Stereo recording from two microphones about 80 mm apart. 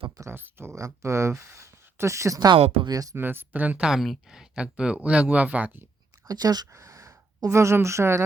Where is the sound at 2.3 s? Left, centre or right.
Right.